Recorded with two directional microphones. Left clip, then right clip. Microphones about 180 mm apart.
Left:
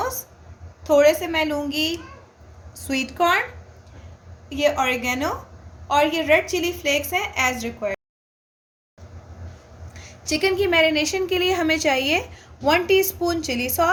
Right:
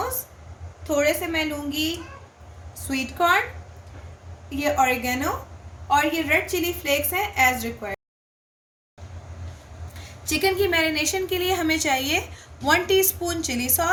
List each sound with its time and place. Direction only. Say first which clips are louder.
0.9 s a woman's voice: left 6 dB; 55° left (ahead or behind)
2.9 s a woman's voice: left 1 dB; 55° left (ahead or behind)
4.5 s a woman's voice: left 1 dB; 55° left (ahead or behind)
6.2 s a woman's voice: left 3 dB; 55° left (ahead or behind)
10.2 s a woman's voice: left 1 dB; 50° left (ahead or behind)